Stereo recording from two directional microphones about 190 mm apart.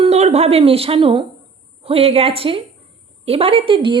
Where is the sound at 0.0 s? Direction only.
35° right (ahead or behind).